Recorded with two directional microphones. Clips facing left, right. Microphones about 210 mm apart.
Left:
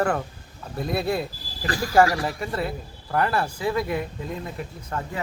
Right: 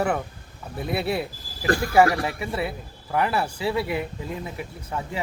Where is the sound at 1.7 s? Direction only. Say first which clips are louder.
Right 5 dB; 55° right (ahead or behind).